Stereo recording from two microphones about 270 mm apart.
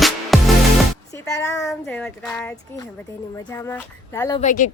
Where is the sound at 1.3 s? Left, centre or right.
Centre.